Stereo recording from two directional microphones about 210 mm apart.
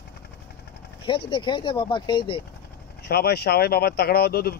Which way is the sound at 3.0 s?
50° left (ahead or behind).